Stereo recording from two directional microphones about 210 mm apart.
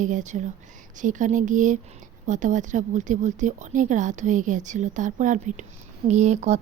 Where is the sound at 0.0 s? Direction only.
35° right (ahead or behind).